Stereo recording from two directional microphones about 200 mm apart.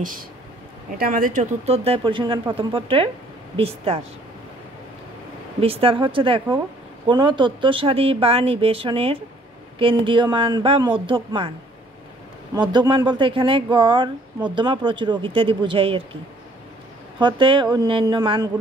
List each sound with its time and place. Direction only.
0.9 s speech: 45° right (ahead or behind); by 4.0 s 30° right (ahead or behind)
5.6 s speech: 30° right (ahead or behind)
12.5 s speech: 20° right (ahead or behind)
17.2 s speech: 25° right (ahead or behind)